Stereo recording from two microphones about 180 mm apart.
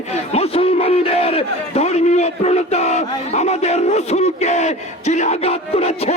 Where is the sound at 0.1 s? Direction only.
35° left (ahead or behind).